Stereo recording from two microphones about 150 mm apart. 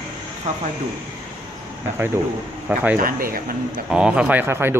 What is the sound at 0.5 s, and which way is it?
Speech, 50° right (ahead or behind).